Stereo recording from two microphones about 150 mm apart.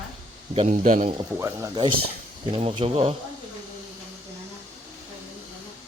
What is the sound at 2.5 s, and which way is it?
Speech, 35° right (ahead or behind).